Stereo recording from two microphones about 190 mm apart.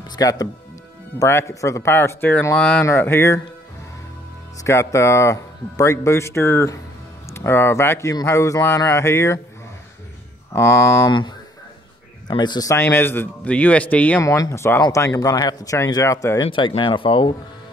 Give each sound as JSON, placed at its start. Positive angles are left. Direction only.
{"t": 0.1, "sound": "speech", "side_deg": 20}
{"t": 4.6, "sound": "speech", "side_deg": 15}
{"t": 10.5, "sound": "speech", "side_deg": 15}
{"t": 16.4, "sound": "speech", "side_deg": 25}